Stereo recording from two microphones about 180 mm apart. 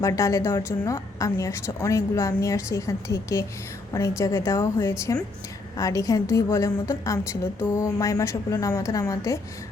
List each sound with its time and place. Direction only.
0.0 s a woman's voice: 15° left (ahead or behind)